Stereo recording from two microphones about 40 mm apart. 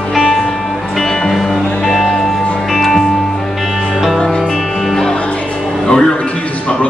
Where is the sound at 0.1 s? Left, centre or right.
Centre.